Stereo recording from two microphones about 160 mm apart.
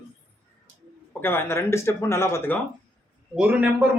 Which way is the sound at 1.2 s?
15° left (ahead or behind).